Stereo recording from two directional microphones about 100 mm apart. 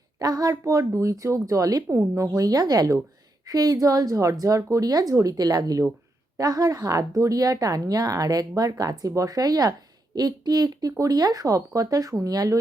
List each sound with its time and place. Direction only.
0.2 s speech: 40° right (ahead or behind)